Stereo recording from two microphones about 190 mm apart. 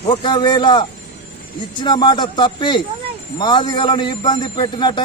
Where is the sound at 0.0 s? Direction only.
30° left (ahead or behind).